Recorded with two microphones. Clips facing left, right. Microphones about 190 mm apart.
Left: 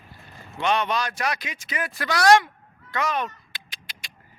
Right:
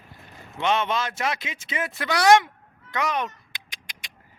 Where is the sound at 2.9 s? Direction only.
20° right (ahead or behind).